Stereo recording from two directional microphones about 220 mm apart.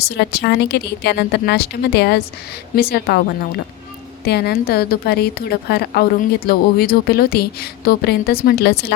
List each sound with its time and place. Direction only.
0.0 s a woman's voice: 50° left (ahead or behind)
4.3 s a woman's voice: 45° left (ahead or behind)